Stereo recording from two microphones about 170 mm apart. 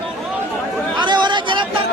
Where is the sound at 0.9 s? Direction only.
25° right (ahead or behind).